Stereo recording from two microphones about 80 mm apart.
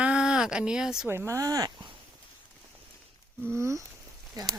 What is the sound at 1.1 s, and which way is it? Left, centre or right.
Speech, right.